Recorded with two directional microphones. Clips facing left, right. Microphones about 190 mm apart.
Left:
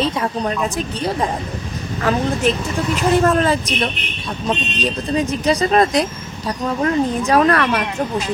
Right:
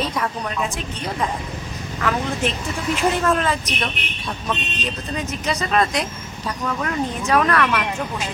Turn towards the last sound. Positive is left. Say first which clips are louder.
# left 4 dB
turn(degrees=35)  # may be behind; listen again after turning